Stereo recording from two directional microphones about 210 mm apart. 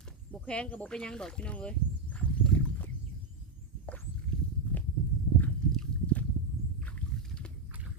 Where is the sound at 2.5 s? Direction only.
5° left (ahead or behind).